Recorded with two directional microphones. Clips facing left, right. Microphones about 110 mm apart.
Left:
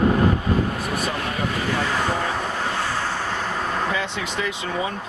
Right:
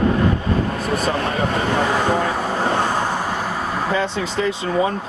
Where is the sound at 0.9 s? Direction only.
30° right (ahead or behind).